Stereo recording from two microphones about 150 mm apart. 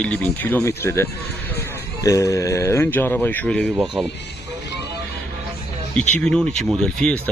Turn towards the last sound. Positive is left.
turn(degrees=5)  # may be behind; listen again after turning